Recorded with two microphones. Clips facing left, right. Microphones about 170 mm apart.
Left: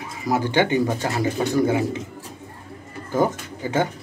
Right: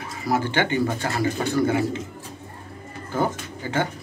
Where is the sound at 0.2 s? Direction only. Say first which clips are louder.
Left 3 dB; 15° left (ahead or behind).